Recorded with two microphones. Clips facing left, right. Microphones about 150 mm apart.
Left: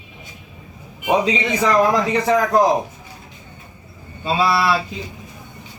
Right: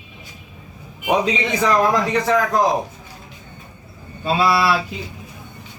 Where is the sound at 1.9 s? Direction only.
20° left (ahead or behind).